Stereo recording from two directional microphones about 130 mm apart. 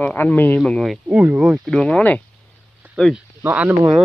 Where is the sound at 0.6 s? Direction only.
Centre (ahead or behind).